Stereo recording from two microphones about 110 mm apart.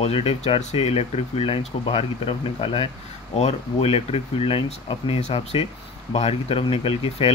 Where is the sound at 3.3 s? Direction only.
70° left (ahead or behind).